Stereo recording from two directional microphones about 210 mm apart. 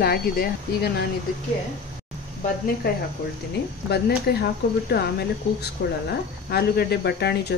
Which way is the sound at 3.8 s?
50° left (ahead or behind).